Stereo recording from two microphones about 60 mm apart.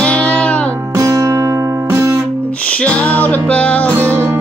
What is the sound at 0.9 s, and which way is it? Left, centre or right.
Music, right.